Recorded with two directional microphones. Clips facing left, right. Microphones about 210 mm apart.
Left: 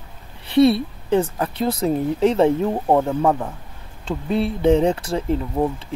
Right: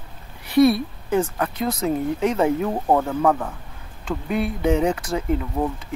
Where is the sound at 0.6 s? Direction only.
25° left (ahead or behind).